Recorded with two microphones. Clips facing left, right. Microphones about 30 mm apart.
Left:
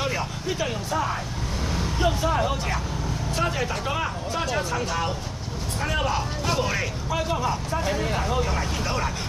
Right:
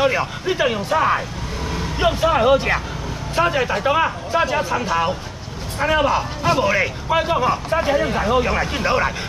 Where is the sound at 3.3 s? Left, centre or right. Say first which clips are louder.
Right 9 dB; right.